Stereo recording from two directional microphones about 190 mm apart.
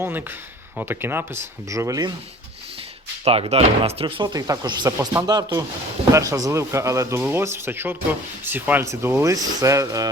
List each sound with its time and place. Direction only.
0.0 s speech: 10° right (ahead or behind)
3.2 s speech: 30° right (ahead or behind)